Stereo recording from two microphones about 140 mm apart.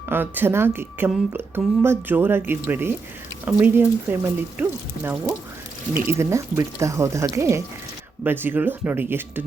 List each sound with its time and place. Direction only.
0.1 s a woman's voice: 15° right (ahead or behind)
6.0 s a woman's voice: 20° right (ahead or behind)